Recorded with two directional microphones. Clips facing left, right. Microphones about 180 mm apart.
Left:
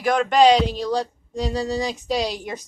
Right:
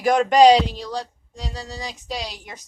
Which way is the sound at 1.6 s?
90° left.